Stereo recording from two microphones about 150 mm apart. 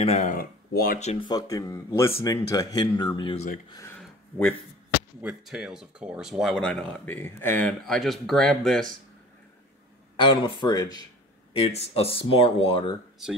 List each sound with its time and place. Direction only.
0.0 s speech: 40° left (ahead or behind)
0.3 s speech: 75° left (ahead or behind)
1.2 s speech: 25° left (ahead or behind)
4.0 s a sound: 5° left (ahead or behind)
5.2 s speech: 5° right (ahead or behind)
10.1 s speech: 35° left (ahead or behind)
11.5 s speech: 40° left (ahead or behind)